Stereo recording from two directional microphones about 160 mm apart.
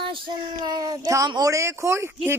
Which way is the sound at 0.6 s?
25° right (ahead or behind).